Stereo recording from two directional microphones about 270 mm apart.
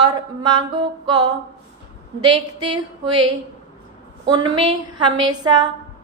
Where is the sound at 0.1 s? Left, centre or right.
Centre.